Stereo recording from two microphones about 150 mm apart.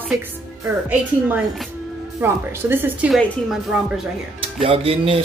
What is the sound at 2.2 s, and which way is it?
Speech, 15° right (ahead or behind).